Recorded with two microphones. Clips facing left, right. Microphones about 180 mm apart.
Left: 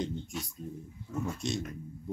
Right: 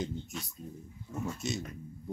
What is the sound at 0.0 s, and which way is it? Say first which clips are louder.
Speech: left 2 dB; centre (ahead or behind).